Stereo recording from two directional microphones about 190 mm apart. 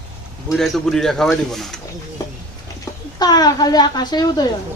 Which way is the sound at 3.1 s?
20° left (ahead or behind).